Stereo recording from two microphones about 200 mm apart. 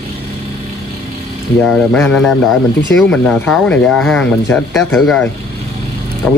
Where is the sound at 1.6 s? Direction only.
5° left (ahead or behind).